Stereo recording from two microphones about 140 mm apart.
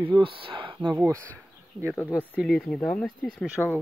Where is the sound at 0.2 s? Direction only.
40° right (ahead or behind).